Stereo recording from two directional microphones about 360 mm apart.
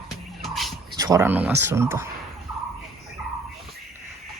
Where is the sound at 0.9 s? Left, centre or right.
Centre.